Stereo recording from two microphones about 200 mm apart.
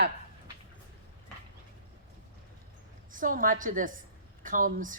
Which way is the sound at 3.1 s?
45° right (ahead or behind).